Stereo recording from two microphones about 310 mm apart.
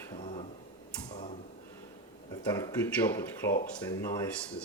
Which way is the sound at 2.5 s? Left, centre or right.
Centre.